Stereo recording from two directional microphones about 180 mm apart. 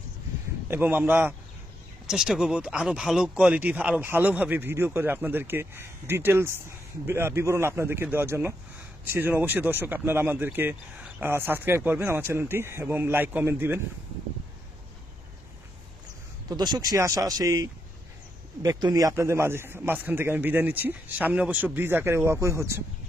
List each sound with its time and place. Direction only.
0.7 s speech: 10° right (ahead or behind)
16.4 s speech: 20° right (ahead or behind)